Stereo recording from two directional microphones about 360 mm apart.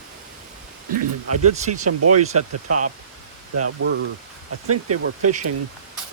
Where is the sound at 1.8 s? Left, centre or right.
Right.